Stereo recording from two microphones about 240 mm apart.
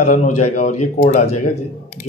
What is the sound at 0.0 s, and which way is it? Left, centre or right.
Speech, left.